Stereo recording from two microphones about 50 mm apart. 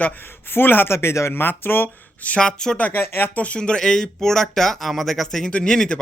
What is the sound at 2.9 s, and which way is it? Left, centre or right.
Speech, left.